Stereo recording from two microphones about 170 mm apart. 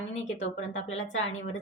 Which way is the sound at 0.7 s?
45° left (ahead or behind).